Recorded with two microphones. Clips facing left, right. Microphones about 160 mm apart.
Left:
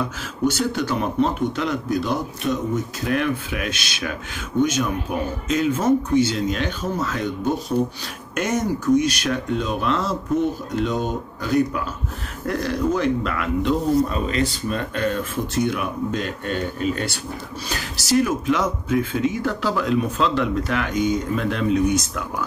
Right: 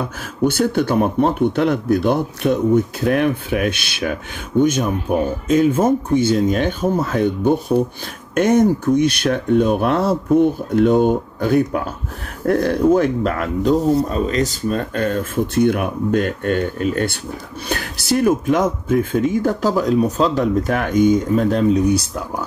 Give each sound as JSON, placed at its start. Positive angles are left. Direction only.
{"t": 0.5, "sound": "speech", "side_deg": -55}